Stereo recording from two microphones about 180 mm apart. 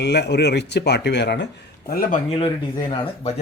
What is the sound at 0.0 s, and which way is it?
Speech, 70° left (ahead or behind).